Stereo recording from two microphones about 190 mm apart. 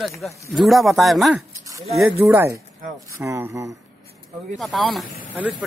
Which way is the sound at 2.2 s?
10° right (ahead or behind).